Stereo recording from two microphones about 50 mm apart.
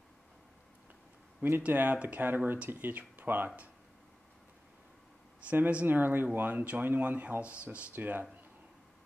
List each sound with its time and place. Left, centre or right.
1.7 s speech: right
2.2 s speech: right
3.4 s speech: right
5.5 s speech: right
5.9 s speech: right